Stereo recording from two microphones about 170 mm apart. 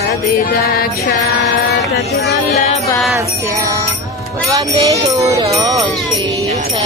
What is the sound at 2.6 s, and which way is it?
Music, 40° left (ahead or behind).